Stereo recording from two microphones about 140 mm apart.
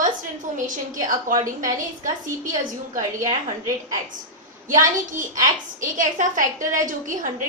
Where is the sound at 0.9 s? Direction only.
70° right (ahead or behind).